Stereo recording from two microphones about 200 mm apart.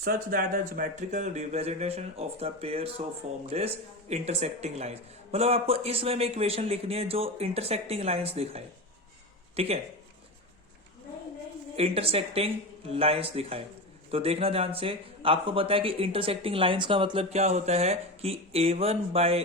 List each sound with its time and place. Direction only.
0.0 s speech: 45° right (ahead or behind); by 9.8 s 30° right (ahead or behind)
11.8 s speech: 30° right (ahead or behind)